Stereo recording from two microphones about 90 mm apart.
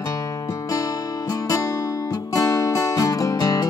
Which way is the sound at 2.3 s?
45° left (ahead or behind).